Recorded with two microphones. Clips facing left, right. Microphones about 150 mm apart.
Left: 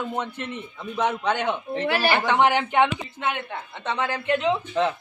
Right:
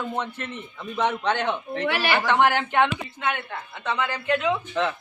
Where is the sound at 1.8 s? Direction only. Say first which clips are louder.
Left 2 dB; 40° left (ahead or behind).